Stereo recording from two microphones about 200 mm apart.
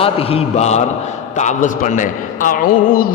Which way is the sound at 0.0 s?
30° left (ahead or behind).